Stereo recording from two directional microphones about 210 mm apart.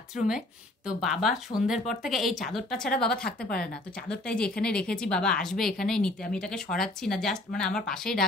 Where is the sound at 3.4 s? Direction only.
45° left (ahead or behind).